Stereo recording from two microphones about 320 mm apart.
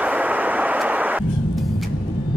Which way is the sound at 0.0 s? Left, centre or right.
Centre.